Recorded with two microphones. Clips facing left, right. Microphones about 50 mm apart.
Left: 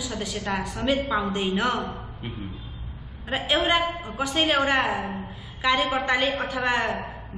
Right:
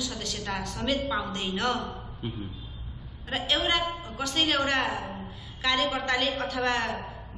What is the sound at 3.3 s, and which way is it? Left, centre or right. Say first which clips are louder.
A woman's voice: left 4 dB; centre.